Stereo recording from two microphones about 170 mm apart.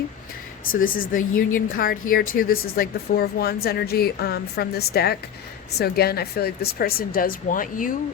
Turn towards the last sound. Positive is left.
turn(degrees=55)  # may be behind; listen again after turning